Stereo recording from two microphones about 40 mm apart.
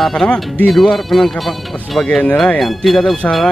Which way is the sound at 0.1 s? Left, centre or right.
Centre.